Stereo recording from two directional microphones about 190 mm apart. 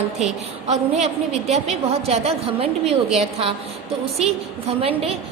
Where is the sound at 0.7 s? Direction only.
35° right (ahead or behind).